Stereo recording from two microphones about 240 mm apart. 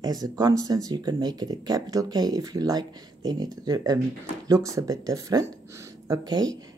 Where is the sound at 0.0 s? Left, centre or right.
Centre.